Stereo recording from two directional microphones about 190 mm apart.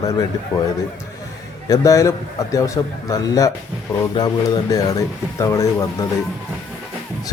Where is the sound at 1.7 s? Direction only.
15° left (ahead or behind).